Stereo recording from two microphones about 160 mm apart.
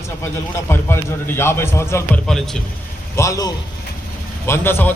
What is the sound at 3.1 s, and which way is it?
A man's voice, 20° left (ahead or behind).